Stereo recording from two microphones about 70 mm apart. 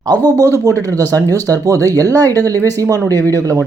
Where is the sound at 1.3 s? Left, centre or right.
Right.